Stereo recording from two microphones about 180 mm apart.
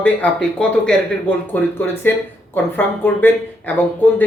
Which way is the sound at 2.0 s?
10° left (ahead or behind).